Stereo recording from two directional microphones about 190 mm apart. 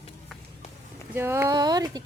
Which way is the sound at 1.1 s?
15° right (ahead or behind).